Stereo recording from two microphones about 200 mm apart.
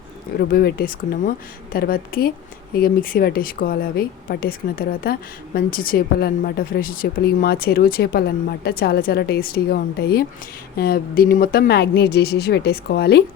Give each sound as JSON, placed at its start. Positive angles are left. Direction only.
{"t": 0.3, "sound": "speech", "side_deg": 50}